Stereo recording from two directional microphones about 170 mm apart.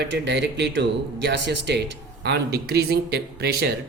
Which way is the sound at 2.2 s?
75° right (ahead or behind).